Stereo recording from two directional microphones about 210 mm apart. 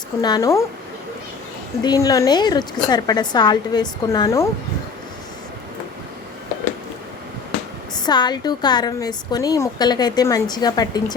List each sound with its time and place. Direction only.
0.2 s speech: 20° left (ahead or behind)
1.8 s speech: 20° left (ahead or behind)
7.9 s speech: 20° left (ahead or behind)